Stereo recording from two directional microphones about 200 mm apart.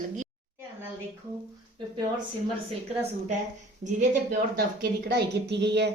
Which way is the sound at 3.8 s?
35° right (ahead or behind).